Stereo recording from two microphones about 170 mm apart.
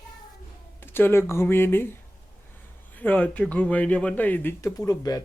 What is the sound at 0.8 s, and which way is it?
Speech, 15° left (ahead or behind).